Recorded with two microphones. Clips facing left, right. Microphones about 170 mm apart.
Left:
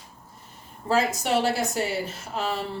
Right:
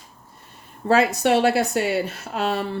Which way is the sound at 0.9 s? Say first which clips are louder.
Right 5 dB; 65° right (ahead or behind).